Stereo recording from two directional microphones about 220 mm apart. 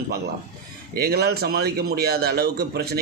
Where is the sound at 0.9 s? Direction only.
45° right (ahead or behind).